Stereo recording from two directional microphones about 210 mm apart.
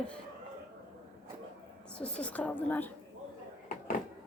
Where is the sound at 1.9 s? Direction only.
5° left (ahead or behind).